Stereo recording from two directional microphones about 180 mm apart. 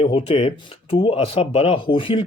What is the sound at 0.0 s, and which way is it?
Speech, 30° left (ahead or behind).